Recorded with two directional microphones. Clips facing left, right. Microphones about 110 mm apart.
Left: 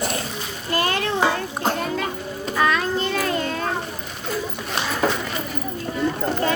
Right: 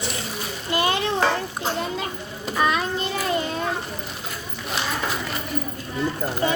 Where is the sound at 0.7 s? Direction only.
20° right (ahead or behind).